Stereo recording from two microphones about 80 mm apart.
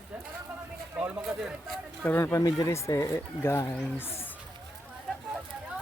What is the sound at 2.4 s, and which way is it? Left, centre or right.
Speech, left.